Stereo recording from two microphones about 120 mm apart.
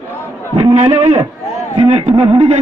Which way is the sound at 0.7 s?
70° right (ahead or behind).